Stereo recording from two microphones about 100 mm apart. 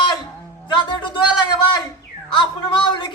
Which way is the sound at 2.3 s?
55° left (ahead or behind).